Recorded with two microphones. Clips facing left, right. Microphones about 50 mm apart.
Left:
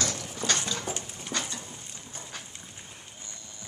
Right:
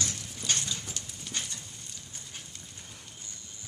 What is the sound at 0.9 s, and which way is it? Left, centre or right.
Dog, left.